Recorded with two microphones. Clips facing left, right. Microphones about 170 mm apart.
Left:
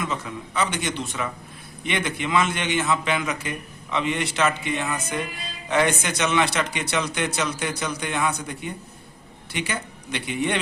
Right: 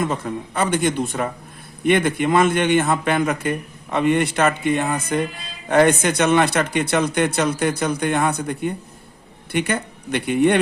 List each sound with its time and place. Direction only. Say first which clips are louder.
0.0 s a man's voice: right 6 dB; 50° right (ahead or behind)